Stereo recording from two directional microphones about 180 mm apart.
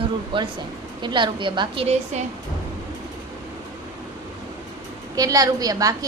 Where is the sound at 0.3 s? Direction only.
25° right (ahead or behind).